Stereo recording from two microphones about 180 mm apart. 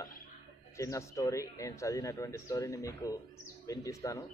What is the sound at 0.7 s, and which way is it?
Speech, 15° left (ahead or behind).